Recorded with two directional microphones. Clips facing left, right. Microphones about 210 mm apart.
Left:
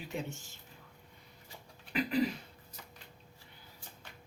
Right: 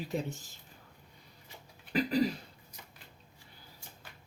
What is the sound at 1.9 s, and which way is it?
Speech, 35° right (ahead or behind).